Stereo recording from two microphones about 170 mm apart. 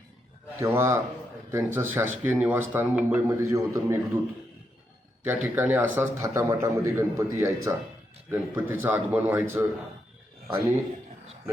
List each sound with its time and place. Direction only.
0.6 s speech: 15° right (ahead or behind)
5.2 s speech: 10° right (ahead or behind)